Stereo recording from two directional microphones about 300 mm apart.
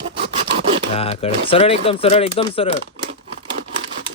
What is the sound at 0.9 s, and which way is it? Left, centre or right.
Speech, centre.